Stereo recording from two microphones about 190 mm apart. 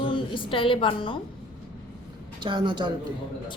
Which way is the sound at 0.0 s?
25° left (ahead or behind).